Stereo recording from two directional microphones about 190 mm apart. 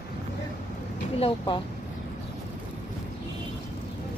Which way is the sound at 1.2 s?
25° left (ahead or behind).